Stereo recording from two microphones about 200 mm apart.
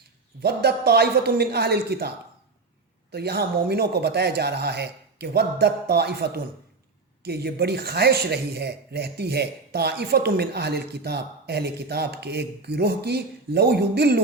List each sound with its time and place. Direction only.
0.4 s speech: 55° right (ahead or behind)